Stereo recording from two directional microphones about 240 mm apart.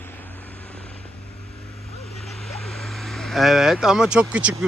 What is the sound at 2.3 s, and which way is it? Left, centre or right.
Speech, centre.